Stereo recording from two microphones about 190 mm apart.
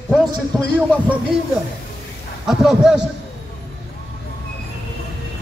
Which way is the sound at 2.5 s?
Centre (ahead or behind).